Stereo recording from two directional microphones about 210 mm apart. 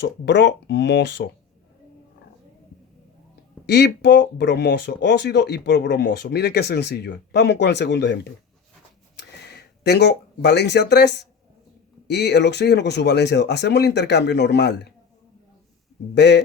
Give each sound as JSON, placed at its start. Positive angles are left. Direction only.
{"t": 0.0, "sound": "speech", "side_deg": 55}
{"t": 3.7, "sound": "speech", "side_deg": 50}
{"t": 16.1, "sound": "speech", "side_deg": 55}